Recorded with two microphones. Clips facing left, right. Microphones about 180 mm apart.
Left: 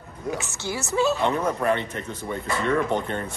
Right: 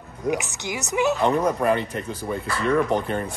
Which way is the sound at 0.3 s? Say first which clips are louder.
Right 3 dB; 15° right (ahead or behind).